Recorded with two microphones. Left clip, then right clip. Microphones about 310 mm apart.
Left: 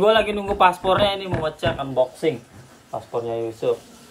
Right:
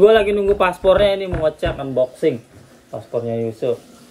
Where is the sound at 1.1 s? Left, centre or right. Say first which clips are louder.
Right 6 dB; right.